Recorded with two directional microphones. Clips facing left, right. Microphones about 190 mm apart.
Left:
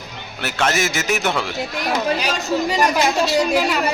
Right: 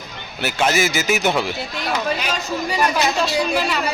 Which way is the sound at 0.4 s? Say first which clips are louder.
Right 2 dB; centre (ahead or behind).